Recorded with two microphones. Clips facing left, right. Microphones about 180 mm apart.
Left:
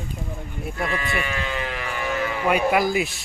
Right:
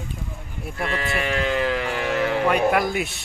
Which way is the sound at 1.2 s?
75° right (ahead or behind).